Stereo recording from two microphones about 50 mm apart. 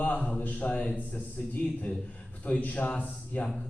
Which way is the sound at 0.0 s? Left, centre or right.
Left.